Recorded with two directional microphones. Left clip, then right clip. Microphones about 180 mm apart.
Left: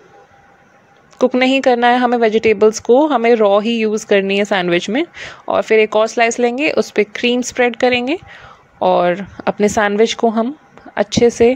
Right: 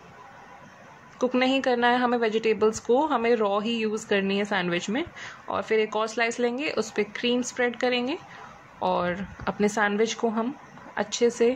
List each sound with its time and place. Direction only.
1.4 s speech: 40° left (ahead or behind)